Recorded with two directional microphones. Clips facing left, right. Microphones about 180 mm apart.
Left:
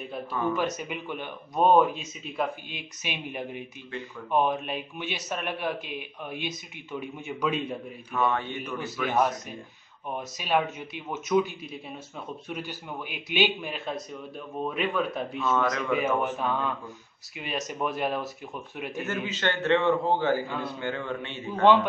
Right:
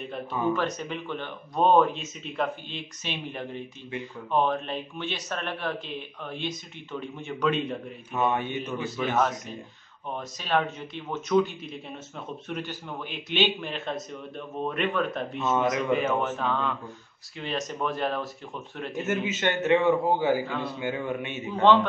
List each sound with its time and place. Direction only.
0.3 s a man's voice: 15° right (ahead or behind)
0.6 s speech: 10° left (ahead or behind)
8.1 s a man's voice: 20° right (ahead or behind)
9.1 s speech: 10° left (ahead or behind)
15.4 s a man's voice: 20° right (ahead or behind)
15.9 s speech: 10° left (ahead or behind)
18.9 s a man's voice: 20° right (ahead or behind)